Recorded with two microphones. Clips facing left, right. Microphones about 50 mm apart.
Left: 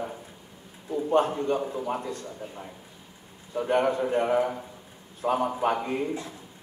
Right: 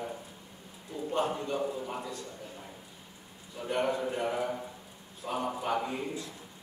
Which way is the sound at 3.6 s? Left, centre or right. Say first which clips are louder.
Left 6 dB; left.